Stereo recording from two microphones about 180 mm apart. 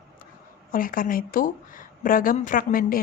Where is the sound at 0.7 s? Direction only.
50° left (ahead or behind).